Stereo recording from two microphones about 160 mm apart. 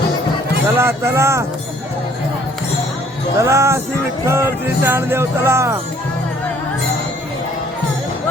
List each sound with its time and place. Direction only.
0.8 s music: 15° right (ahead or behind)
3.3 s music: 20° right (ahead or behind)